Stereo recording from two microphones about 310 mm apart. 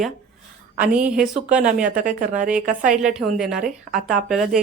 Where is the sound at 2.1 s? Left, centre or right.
Right.